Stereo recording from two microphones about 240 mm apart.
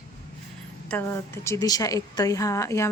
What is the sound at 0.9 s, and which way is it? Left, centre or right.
A woman's voice, centre.